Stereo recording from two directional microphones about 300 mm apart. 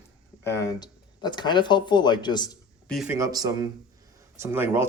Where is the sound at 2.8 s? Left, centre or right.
Centre.